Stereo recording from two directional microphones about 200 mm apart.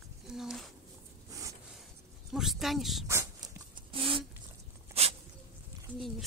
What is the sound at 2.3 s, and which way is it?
Speech, centre (ahead or behind).